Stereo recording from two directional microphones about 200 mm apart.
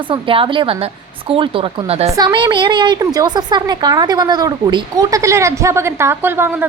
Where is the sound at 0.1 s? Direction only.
25° right (ahead or behind).